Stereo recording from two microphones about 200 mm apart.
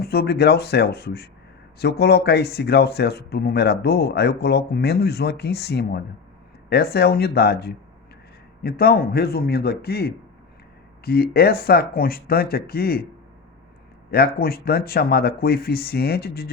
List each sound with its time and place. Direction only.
0.0 s speech: 50° left (ahead or behind)
14.1 s speech: 50° left (ahead or behind)